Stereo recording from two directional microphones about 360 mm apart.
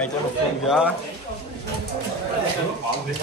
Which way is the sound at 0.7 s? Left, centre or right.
Centre.